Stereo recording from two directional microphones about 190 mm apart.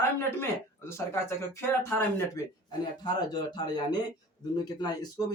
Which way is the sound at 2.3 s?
20° left (ahead or behind).